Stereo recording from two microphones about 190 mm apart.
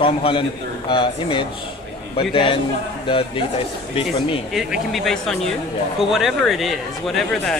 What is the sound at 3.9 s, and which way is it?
Speech, 30° left (ahead or behind).